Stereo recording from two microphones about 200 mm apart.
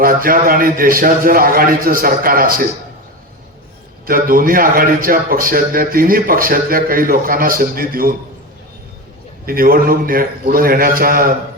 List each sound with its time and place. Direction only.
0.0 s a man's voice: 45° right (ahead or behind)
4.0 s a man's voice: 45° right (ahead or behind)
9.5 s a man's voice: 45° right (ahead or behind)